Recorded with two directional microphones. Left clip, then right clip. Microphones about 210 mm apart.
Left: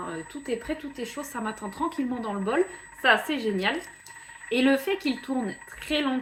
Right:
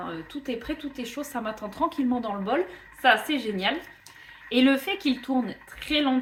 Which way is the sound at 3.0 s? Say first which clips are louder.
Right 1 dB; 15° right (ahead or behind).